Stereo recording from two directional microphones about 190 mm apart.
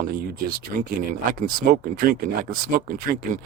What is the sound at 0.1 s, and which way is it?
Speech, 50° right (ahead or behind).